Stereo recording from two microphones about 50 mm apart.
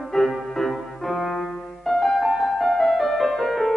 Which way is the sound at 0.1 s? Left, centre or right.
Centre.